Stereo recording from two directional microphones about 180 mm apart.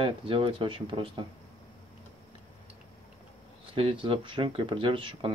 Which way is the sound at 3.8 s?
30° right (ahead or behind).